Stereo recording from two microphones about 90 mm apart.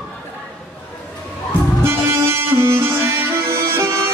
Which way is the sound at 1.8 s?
30° right (ahead or behind).